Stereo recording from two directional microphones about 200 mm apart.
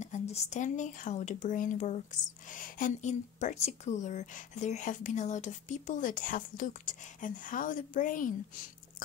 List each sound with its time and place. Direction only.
0.0 s speech: 35° left (ahead or behind)